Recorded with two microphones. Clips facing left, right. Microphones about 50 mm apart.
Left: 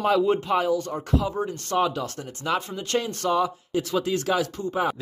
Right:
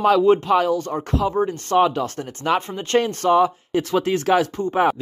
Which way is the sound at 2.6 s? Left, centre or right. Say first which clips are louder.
Right 6 dB; right.